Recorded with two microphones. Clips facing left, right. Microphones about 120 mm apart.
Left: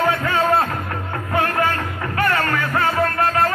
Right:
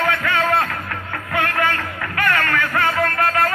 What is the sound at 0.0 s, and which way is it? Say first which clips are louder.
Music: left 1 dB; 30° left (ahead or behind).